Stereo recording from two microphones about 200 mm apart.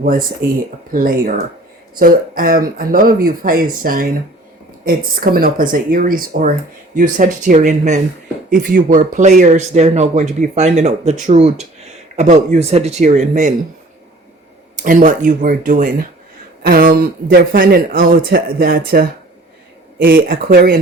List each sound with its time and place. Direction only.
0.9 s speech: 45° right (ahead or behind)
14.8 s speech: 40° right (ahead or behind)